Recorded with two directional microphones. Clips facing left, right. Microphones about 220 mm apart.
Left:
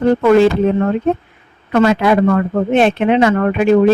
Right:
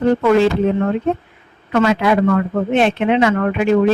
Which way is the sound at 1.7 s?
45° left (ahead or behind).